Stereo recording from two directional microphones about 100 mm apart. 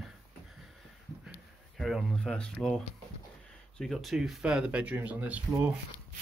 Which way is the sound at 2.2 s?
10° left (ahead or behind).